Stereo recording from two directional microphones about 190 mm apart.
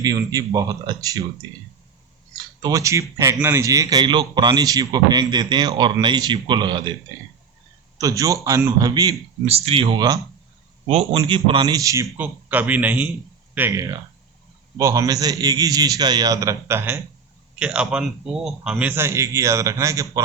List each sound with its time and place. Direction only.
0.0 s a man's voice: 20° right (ahead or behind)
2.6 s a man's voice: 20° right (ahead or behind)
7.9 s a man's voice: 20° right (ahead or behind)
9.5 s a man's voice: 30° right (ahead or behind); by 20.1 s 15° right (ahead or behind)